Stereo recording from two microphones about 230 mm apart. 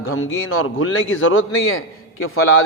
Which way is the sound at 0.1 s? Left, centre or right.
Left.